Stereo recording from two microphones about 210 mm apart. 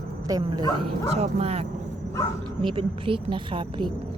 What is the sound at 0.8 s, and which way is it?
Speech, 30° right (ahead or behind).